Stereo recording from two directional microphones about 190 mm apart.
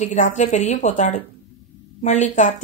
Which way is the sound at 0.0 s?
40° left (ahead or behind).